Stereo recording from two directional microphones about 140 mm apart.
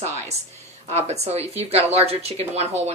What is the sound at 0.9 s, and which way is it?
A woman's voice, 50° right (ahead or behind).